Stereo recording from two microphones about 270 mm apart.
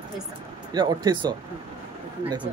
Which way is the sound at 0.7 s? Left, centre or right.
Centre.